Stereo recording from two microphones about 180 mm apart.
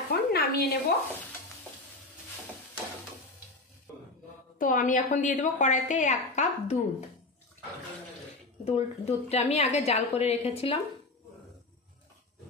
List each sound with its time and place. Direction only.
0.1 s a sound: 60° left (ahead or behind)
4.6 s a woman's voice: 50° left (ahead or behind)
8.6 s a woman's voice: 35° left (ahead or behind)